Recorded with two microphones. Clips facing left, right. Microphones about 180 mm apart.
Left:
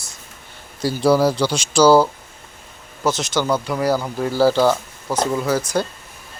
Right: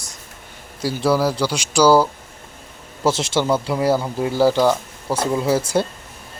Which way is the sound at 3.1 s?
25° right (ahead or behind).